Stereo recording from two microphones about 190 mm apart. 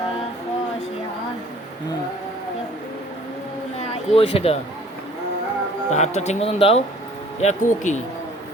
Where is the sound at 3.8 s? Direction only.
30° left (ahead or behind).